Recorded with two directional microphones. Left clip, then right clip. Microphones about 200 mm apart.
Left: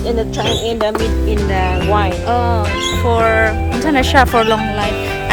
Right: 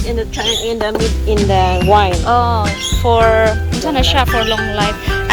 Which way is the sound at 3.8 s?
15° left (ahead or behind).